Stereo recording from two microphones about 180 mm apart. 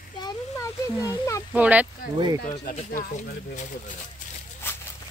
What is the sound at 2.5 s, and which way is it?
Speech, 45° left (ahead or behind).